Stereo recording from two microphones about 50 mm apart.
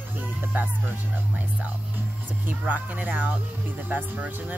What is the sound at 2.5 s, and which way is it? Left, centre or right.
Speech, right.